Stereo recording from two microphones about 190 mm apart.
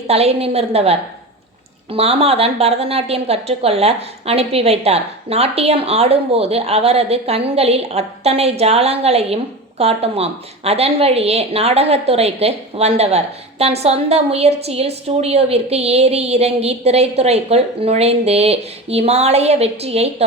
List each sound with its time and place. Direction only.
0.1 s a woman's voice: 35° right (ahead or behind)